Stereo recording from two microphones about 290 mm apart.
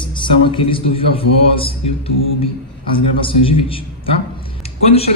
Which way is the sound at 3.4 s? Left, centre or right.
Centre.